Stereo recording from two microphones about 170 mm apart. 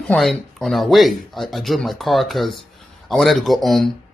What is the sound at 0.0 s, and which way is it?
A man's voice, 5° left (ahead or behind).